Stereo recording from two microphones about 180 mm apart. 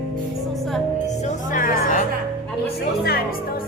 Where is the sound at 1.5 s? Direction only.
45° left (ahead or behind).